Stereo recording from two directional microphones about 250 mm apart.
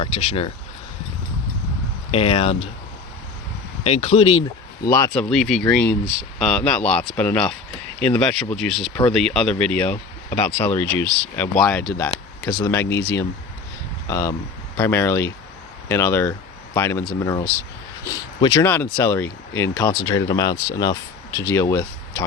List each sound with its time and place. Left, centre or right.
0.0 s speech: left
2.0 s speech: left
3.8 s speech: left
4.9 s speech: centre
5.3 s speech: centre